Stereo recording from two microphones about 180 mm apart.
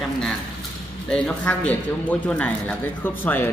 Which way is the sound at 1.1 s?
5° left (ahead or behind).